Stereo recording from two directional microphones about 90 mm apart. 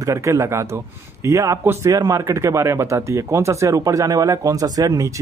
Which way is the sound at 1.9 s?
40° right (ahead or behind).